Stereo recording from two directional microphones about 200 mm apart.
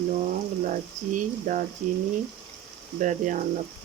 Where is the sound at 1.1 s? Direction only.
40° right (ahead or behind).